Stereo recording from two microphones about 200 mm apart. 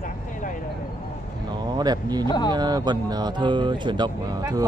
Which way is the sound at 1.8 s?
20° right (ahead or behind).